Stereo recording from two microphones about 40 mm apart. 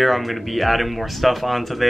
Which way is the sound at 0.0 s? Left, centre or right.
Centre.